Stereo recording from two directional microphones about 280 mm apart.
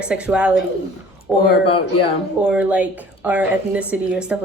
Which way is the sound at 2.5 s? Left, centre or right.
Centre.